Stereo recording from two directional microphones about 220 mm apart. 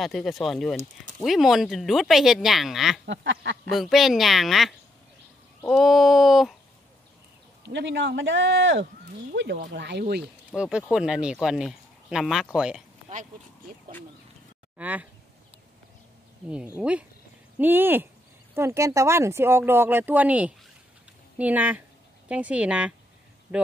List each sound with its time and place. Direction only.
0.0 s speech: centre (ahead or behind)
3.1 s speech: 55° right (ahead or behind)
3.7 s speech: centre (ahead or behind)
7.7 s speech: 55° right (ahead or behind)
10.2 s speech: 5° right (ahead or behind)
14.8 s speech: 5° right (ahead or behind)
16.4 s speech: 5° right (ahead or behind)